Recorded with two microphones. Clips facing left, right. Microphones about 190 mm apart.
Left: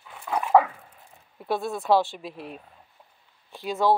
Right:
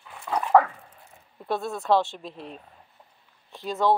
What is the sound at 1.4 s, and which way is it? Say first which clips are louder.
A woman's voice: left 1 dB; 10° left (ahead or behind).